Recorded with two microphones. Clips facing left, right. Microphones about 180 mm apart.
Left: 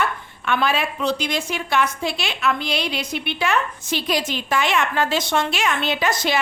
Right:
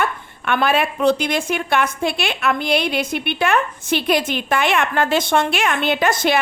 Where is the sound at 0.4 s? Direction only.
55° right (ahead or behind).